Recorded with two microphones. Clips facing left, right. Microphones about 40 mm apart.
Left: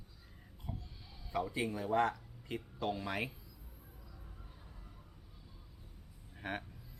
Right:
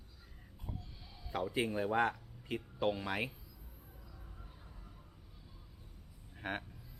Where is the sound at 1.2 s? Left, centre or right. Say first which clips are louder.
Left 1 dB; centre.